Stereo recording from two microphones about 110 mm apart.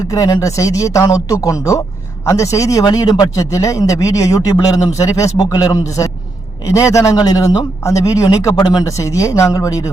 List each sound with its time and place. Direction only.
0.1 s a man's voice: 30° left (ahead or behind)